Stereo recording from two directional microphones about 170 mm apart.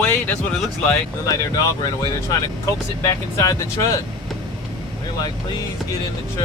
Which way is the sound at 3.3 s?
20° left (ahead or behind).